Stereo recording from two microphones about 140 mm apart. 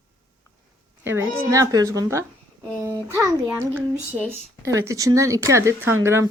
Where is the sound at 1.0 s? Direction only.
15° right (ahead or behind).